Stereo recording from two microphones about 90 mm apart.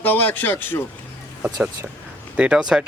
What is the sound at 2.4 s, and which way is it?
Speech, 10° right (ahead or behind).